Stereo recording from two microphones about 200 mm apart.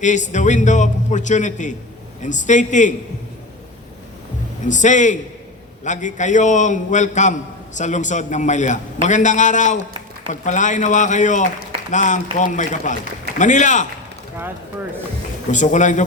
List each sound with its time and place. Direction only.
0.0 s a man's voice: 35° left (ahead or behind)
4.6 s a man's voice: 40° left (ahead or behind)
15.5 s a man's voice: 40° left (ahead or behind)